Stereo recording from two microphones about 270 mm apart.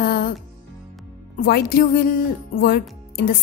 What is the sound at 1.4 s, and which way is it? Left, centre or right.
A woman's voice, left.